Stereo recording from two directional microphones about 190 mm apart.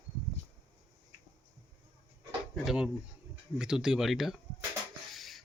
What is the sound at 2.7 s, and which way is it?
Speech, 5° right (ahead or behind).